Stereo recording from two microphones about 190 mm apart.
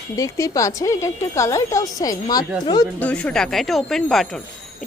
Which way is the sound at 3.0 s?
5° left (ahead or behind).